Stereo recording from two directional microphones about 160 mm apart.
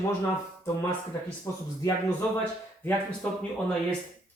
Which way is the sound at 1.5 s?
20° left (ahead or behind).